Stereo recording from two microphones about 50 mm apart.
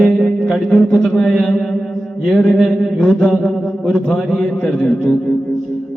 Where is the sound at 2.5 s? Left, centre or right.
Centre.